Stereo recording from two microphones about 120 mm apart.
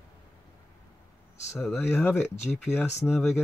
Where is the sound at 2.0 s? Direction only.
5° right (ahead or behind).